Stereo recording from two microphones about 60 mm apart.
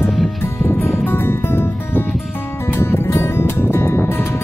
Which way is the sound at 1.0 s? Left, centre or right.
Left.